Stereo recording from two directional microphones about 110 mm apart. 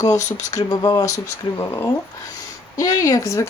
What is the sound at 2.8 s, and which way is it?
Speech, 30° left (ahead or behind).